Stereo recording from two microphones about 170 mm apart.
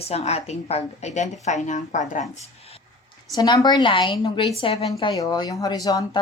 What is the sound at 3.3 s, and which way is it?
A woman's voice, 25° left (ahead or behind).